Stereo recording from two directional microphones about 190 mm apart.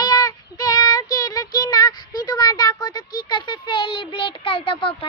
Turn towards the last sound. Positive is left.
turn(degrees=25)  # may be behind; listen again after turning